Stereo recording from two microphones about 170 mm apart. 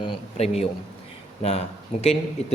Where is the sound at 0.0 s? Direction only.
35° left (ahead or behind).